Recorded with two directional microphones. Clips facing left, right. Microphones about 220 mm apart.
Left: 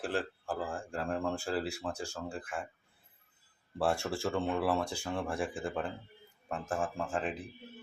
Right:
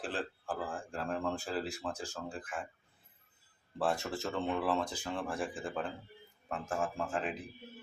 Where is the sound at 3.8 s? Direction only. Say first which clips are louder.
Left 2 dB; 10° left (ahead or behind).